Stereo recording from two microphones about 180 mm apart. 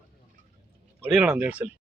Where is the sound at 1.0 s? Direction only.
5° right (ahead or behind).